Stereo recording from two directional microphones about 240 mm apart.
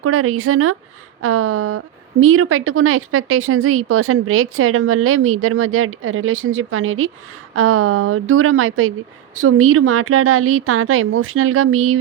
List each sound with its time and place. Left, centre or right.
0.0 s a woman's voice: right